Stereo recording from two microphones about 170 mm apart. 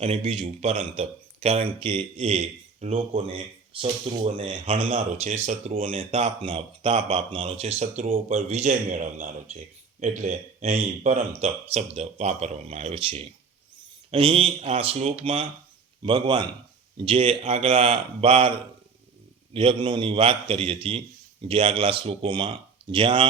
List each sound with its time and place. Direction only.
0.0 s speech: 35° right (ahead or behind)
19.5 s speech: 30° right (ahead or behind)